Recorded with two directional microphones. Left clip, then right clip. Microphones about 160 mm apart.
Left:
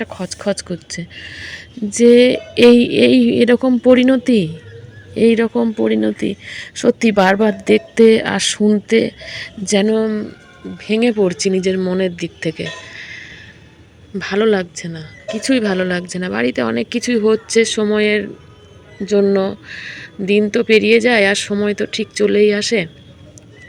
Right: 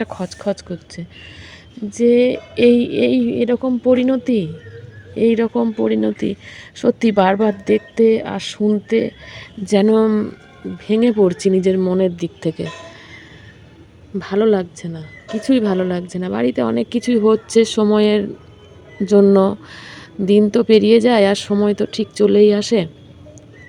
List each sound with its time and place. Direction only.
0.0 s speech: 10° right (ahead or behind)
9.7 s speech: 20° right (ahead or behind)
10.8 s speech: 15° right (ahead or behind)
19.3 s speech: 30° right (ahead or behind)